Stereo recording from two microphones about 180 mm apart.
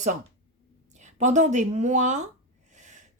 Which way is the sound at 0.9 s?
40° right (ahead or behind).